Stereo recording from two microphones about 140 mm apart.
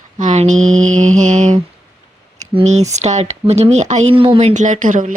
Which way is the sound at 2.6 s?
55° right (ahead or behind).